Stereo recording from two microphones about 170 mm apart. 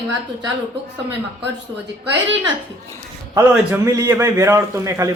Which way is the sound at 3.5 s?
15° right (ahead or behind).